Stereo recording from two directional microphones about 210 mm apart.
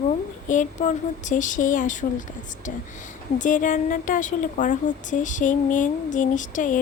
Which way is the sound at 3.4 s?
40° left (ahead or behind).